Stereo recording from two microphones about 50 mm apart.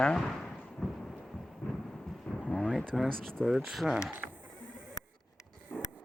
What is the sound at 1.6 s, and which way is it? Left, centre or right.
Thunder, left.